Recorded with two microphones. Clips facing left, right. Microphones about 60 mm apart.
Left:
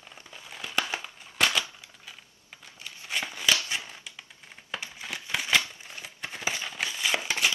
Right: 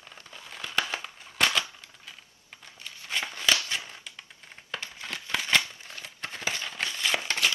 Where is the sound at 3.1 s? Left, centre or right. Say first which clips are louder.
Even; centre.